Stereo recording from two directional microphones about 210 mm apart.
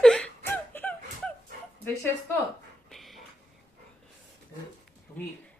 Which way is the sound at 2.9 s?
Centre (ahead or behind).